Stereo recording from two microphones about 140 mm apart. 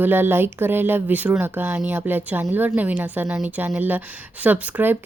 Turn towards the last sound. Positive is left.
turn(degrees=-10)  # may be behind; listen again after turning